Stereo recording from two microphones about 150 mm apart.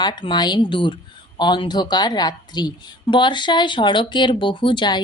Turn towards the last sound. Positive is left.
turn(degrees=30)  # may be behind; listen again after turning